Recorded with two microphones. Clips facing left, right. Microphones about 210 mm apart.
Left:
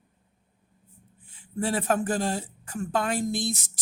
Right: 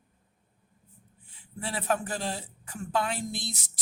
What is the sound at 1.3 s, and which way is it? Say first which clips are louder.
Speech: left 9 dB; 45° left (ahead or behind).